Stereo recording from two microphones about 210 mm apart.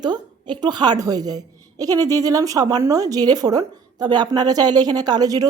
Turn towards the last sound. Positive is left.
turn(degrees=-15)  # may be behind; listen again after turning